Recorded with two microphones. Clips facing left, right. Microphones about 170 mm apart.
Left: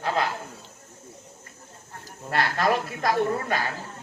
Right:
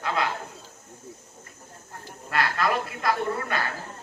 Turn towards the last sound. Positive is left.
turn(degrees=40)  # may be behind; listen again after turning